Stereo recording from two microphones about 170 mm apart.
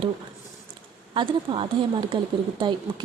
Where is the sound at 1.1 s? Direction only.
30° right (ahead or behind).